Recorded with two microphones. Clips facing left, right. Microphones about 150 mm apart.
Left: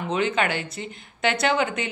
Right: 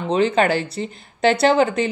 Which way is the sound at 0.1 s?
35° right (ahead or behind).